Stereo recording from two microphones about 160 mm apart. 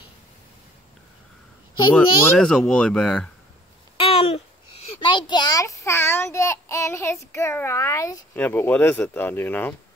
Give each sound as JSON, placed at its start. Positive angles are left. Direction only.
{"t": 2.0, "sound": "speech", "side_deg": 5}
{"t": 3.9, "sound": "babbling", "side_deg": 40}
{"t": 4.8, "sound": "a child's voice", "side_deg": 30}